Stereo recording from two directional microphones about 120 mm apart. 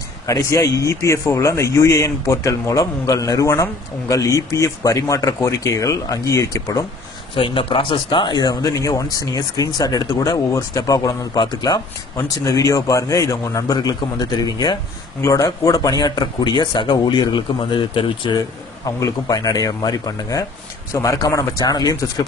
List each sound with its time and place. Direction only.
0.3 s a man's voice: 25° left (ahead or behind)
7.3 s a man's voice: 50° left (ahead or behind)
18.9 s a man's voice: 30° left (ahead or behind)